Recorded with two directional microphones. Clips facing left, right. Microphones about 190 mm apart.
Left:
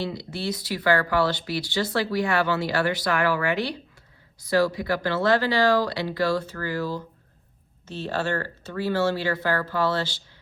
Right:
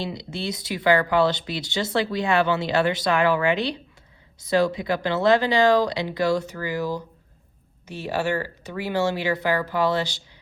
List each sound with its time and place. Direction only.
0.0 s speech: 20° right (ahead or behind)